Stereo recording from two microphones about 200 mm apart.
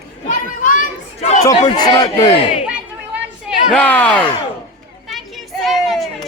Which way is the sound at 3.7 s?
5° left (ahead or behind).